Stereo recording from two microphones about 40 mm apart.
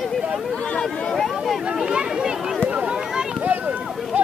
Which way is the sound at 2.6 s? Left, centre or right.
Right.